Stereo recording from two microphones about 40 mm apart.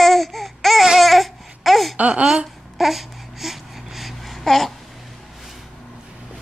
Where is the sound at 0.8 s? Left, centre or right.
Centre.